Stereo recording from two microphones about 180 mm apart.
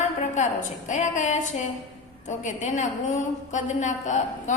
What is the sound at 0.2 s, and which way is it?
A woman's voice, 40° left (ahead or behind).